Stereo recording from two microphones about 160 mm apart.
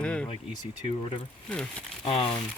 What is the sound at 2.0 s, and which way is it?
Speech, 35° left (ahead or behind).